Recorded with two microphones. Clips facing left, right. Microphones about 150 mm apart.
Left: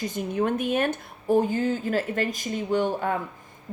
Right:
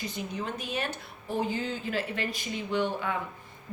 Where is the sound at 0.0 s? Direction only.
45° left (ahead or behind).